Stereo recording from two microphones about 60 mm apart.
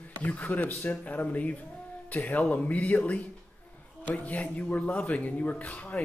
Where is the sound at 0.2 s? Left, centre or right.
Left.